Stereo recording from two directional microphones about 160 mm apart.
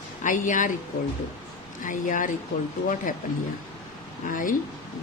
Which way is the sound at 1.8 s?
55° left (ahead or behind).